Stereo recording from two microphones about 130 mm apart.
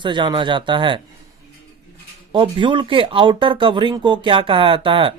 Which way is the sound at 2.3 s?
40° right (ahead or behind).